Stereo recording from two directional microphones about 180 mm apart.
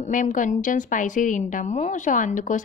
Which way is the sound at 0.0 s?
45° left (ahead or behind).